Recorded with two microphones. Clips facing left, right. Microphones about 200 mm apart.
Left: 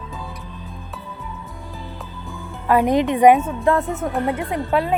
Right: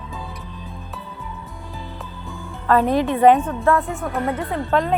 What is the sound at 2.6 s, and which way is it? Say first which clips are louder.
A woman's voice: left 1 dB; 15° left (ahead or behind).